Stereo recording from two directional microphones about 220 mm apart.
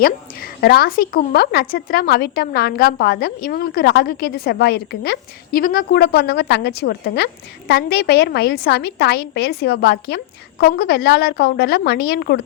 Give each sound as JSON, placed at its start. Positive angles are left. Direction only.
{"t": 0.0, "sound": "a woman's voice", "side_deg": 45}